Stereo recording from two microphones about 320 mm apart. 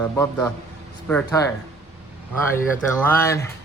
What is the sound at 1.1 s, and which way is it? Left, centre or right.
Speech, centre.